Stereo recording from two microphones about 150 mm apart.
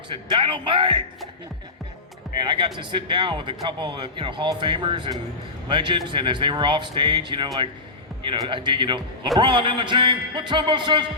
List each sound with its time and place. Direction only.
0.1 s speech: 35° right (ahead or behind)
2.3 s speech: 30° right (ahead or behind)